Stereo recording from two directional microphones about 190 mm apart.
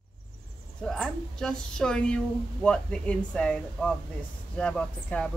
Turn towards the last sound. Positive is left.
turn(degrees=5)  # may be behind; listen again after turning